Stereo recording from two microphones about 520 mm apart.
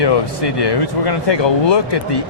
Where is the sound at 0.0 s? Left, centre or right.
Left.